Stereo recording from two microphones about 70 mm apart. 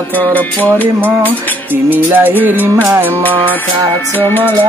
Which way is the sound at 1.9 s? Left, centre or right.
Right.